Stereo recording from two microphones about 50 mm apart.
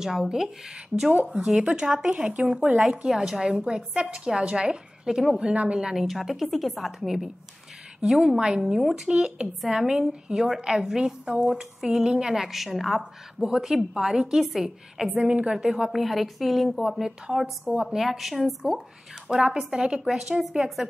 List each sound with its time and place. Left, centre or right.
0.0 s a woman's voice: centre
5.5 s a woman's voice: right
5.8 s a woman's voice: centre
15.1 s a woman's voice: centre
19.2 s a woman's voice: centre